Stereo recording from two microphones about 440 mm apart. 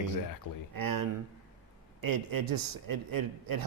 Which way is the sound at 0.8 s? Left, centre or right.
Right.